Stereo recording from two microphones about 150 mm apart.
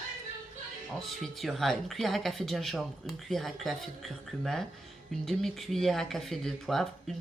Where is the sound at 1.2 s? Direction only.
Centre (ahead or behind).